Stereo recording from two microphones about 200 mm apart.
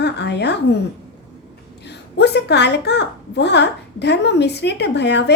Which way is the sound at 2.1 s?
60° left (ahead or behind).